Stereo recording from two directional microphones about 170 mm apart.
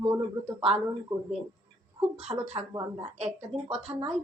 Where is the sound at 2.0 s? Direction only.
40° right (ahead or behind).